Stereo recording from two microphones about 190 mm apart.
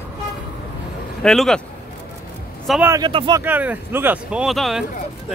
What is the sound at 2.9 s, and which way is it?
Speech, 25° right (ahead or behind).